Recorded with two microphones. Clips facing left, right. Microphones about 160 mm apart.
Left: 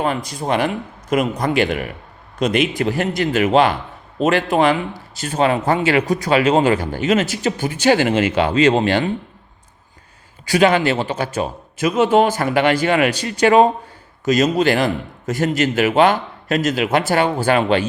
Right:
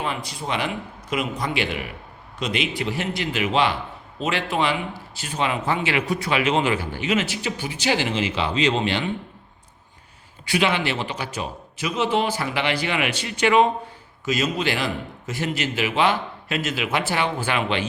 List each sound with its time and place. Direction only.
0.0 s a man's voice: 45° left (ahead or behind)
10.4 s a man's voice: 45° left (ahead or behind)